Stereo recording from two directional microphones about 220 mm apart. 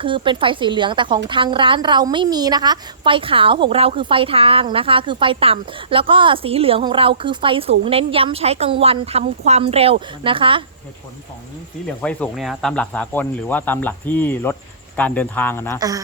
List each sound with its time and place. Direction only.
0.0 s a woman's voice: 20° right (ahead or behind)
12.0 s speech: centre (ahead or behind)